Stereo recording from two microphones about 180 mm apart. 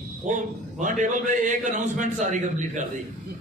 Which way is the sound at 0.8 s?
45° right (ahead or behind).